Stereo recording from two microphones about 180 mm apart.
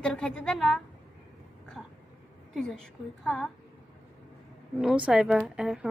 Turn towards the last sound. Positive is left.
turn(degrees=-5)  # may be behind; listen again after turning